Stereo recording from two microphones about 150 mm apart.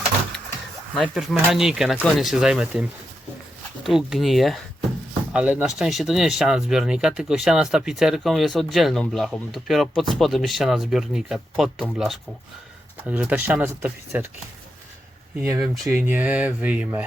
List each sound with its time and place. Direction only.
0.9 s speech: centre (ahead or behind)
3.8 s speech: centre (ahead or behind)
15.6 s speech: centre (ahead or behind)
15.9 s speech: 15° right (ahead or behind)